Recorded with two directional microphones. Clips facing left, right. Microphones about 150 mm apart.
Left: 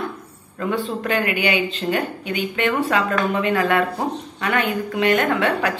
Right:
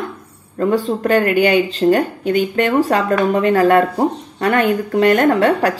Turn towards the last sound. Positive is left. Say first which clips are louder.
# right 7 dB
turn(degrees=-40)  # may be behind; listen again after turning